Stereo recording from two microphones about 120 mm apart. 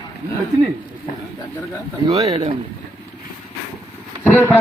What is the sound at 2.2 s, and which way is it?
Speech, 50° right (ahead or behind).